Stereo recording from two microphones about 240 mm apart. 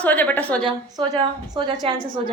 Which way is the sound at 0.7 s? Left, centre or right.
Centre.